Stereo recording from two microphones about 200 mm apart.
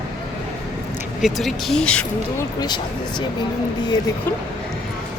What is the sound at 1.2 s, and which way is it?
Speech, centre (ahead or behind).